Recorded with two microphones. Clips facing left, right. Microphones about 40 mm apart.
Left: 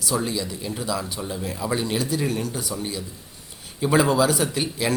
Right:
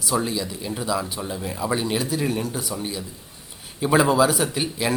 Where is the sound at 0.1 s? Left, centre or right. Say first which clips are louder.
Right 1 dB; centre.